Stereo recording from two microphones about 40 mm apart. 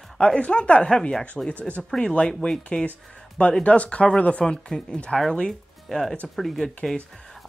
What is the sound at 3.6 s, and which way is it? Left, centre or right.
Speech, left.